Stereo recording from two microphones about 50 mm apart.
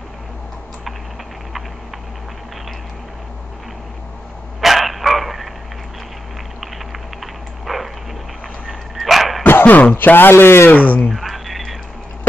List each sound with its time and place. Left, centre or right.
4.6 s dog: centre
7.6 s dog: centre
8.9 s dog: centre
9.4 s dog: left
9.9 s speech: left
10.7 s speech: left
11.1 s a sound: centre